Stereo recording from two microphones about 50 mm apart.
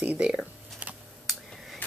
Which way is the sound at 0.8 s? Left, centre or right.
Right.